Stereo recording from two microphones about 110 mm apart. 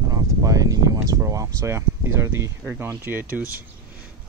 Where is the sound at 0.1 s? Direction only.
30° right (ahead or behind).